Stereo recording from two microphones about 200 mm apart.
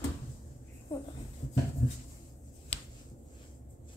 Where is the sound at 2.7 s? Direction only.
30° left (ahead or behind).